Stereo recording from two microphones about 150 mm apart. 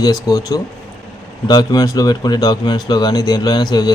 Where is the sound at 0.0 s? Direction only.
25° left (ahead or behind).